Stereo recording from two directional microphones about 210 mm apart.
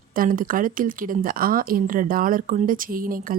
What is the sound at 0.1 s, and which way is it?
Speech, 40° right (ahead or behind).